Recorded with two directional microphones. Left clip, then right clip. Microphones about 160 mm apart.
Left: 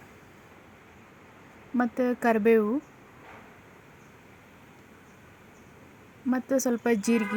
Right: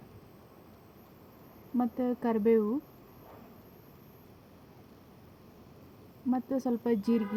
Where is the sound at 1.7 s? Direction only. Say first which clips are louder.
Left 5 dB; 5° left (ahead or behind).